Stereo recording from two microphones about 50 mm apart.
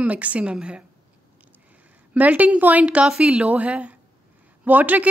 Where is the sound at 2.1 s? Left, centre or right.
Right.